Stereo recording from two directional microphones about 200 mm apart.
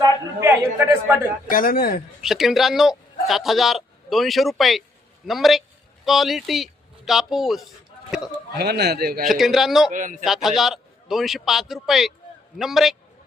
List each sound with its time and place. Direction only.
0.3 s a man's voice: 10° right (ahead or behind)
1.5 s speech: 45° left (ahead or behind)
2.2 s a man's voice: centre (ahead or behind)
8.5 s a man's voice: 55° right (ahead or behind)
9.2 s a man's voice: centre (ahead or behind)
9.9 s a man's voice: 40° right (ahead or behind)
10.2 s a man's voice: centre (ahead or behind)